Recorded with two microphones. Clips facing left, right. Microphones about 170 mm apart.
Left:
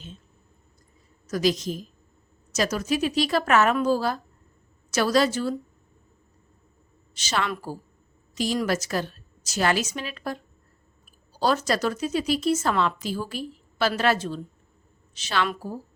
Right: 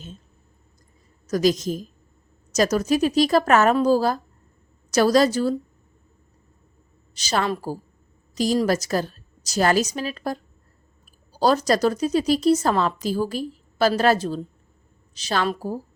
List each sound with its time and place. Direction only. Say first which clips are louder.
1.3 s a woman's voice: right 4 dB; 45° right (ahead or behind)
7.2 s speech: right 4 dB; 35° right (ahead or behind)